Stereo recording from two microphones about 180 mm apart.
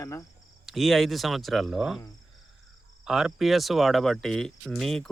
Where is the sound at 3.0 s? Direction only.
5° right (ahead or behind).